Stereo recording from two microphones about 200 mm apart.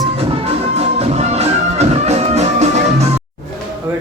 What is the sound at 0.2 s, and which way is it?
Music, 30° right (ahead or behind).